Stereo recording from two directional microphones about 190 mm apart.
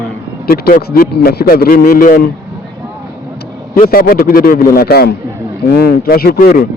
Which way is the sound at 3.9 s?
50° left (ahead or behind).